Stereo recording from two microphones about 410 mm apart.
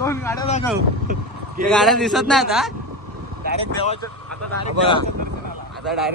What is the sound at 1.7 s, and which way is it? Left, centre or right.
Speech, centre.